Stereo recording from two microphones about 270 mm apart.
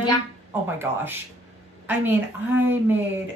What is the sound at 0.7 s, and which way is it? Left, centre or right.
A woman's voice, centre.